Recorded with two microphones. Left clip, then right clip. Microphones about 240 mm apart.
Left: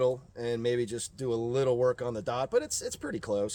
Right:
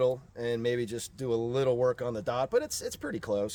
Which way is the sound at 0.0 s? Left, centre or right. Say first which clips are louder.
Even; centre.